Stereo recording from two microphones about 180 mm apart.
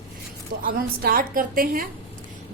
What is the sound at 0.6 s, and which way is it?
A woman's voice, 50° right (ahead or behind).